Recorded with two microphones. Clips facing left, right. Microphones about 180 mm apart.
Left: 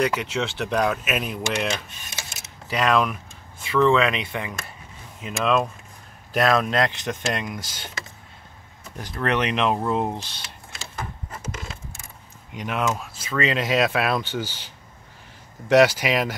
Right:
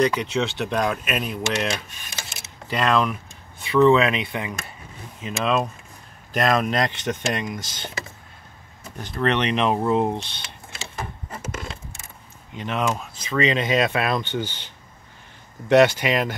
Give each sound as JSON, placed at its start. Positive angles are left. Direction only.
{"t": 0.0, "sound": "speech", "side_deg": 5}
{"t": 2.7, "sound": "speech", "side_deg": 5}
{"t": 9.0, "sound": "speech", "side_deg": 5}
{"t": 12.5, "sound": "speech", "side_deg": 5}
{"t": 15.7, "sound": "speech", "side_deg": 5}